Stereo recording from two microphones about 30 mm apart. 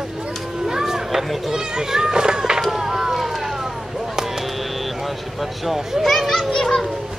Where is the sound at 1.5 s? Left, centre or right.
Centre.